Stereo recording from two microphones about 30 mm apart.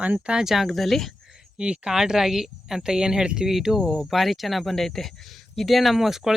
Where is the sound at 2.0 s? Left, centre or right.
Centre.